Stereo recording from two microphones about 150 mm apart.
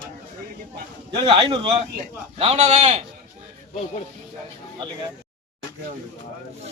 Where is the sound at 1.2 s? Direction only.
35° right (ahead or behind).